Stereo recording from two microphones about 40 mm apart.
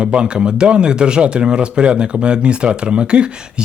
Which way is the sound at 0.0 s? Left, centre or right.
Right.